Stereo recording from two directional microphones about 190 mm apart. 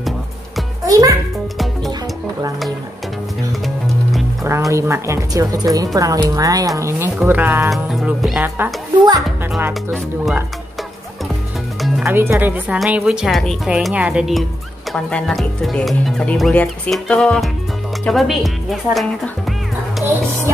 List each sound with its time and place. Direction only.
0.8 s music: 20° right (ahead or behind)
3.6 s music: centre (ahead or behind)
4.4 s a woman's voice: 15° right (ahead or behind)
11.8 s speech: 5° right (ahead or behind)